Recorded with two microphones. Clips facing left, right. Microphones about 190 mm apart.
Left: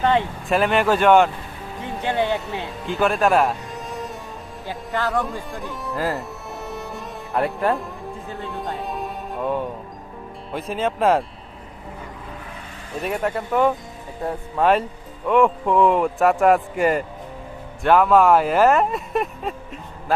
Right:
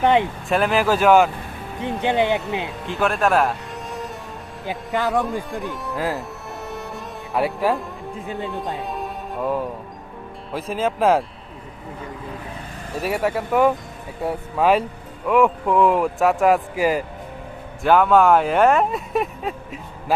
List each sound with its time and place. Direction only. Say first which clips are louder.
0.0 s speech: right 2 dB; 15° right (ahead or behind)
0.4 s speech: even; centre (ahead or behind)
1.8 s speech: right 3 dB; 20° right (ahead or behind)
2.8 s speech: left 2 dB; centre (ahead or behind)
4.6 s speech: right 2 dB; 20° right (ahead or behind)
5.1 s speech: right 3 dB; centre (ahead or behind)
12.9 s speech: right 2 dB; 5° right (ahead or behind)